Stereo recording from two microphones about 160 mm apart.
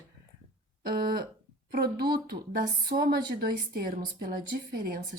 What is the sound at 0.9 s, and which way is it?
A woman's voice, 70° right (ahead or behind).